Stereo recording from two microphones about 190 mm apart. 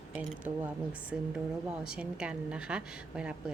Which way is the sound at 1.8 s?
5° right (ahead or behind).